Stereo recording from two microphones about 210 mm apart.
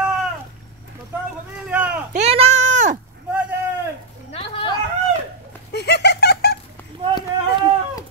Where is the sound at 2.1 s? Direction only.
30° right (ahead or behind).